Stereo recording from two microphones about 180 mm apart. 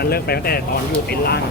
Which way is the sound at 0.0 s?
60° left (ahead or behind).